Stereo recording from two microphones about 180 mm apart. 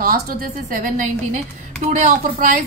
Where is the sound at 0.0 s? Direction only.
50° right (ahead or behind).